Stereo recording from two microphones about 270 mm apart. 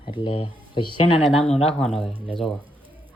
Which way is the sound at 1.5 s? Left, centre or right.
Left.